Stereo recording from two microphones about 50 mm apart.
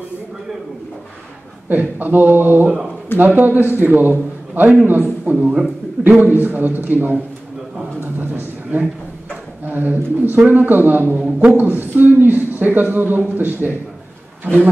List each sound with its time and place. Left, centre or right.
1.7 s a man's voice: right
5.3 s a man's voice: right
6.0 s a man's voice: right
8.0 s a sound: right
9.7 s a man's voice: right